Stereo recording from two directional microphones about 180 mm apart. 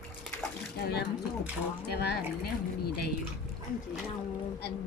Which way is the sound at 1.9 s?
65° left (ahead or behind).